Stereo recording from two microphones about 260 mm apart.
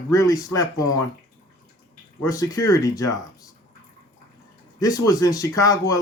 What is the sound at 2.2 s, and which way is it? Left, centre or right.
Speech, centre.